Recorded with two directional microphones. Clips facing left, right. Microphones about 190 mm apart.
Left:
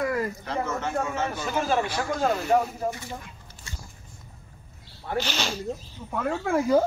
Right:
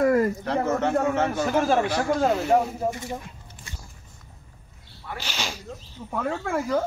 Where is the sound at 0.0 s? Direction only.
45° right (ahead or behind).